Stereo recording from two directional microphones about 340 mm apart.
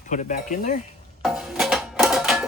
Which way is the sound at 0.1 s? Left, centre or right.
Left.